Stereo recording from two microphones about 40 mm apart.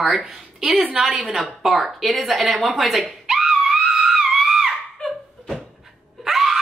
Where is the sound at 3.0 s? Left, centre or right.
Centre.